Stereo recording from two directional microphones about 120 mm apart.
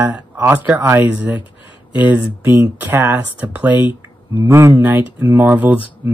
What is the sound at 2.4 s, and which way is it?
Speech, 15° right (ahead or behind).